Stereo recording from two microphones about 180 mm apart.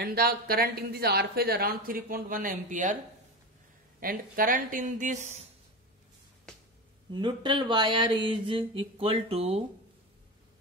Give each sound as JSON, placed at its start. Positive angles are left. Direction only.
{"t": 0.0, "sound": "speech", "side_deg": -60}
{"t": 4.0, "sound": "speech", "side_deg": -50}
{"t": 7.1, "sound": "speech", "side_deg": -25}